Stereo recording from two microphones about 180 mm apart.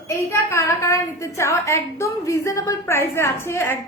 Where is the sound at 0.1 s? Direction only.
15° left (ahead or behind).